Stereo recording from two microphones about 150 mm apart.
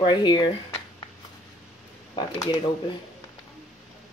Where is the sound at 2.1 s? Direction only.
30° left (ahead or behind).